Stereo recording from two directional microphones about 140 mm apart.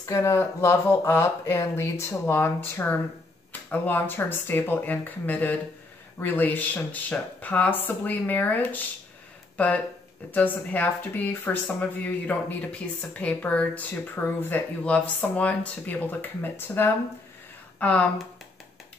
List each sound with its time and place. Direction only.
0.0 s speech: 20° left (ahead or behind)
10.3 s speech: 10° left (ahead or behind)